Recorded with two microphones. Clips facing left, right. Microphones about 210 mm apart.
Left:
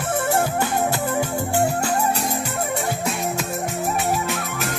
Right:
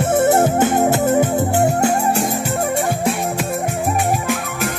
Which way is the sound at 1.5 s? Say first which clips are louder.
Right 3 dB; 20° right (ahead or behind).